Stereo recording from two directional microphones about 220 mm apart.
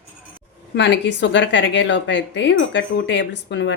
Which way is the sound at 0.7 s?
50° left (ahead or behind).